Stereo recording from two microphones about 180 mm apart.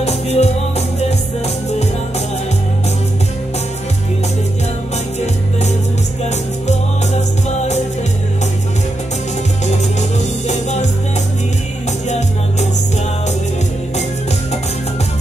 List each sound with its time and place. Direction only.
0.0 s music: 35° left (ahead or behind)
5.2 s music: 40° left (ahead or behind)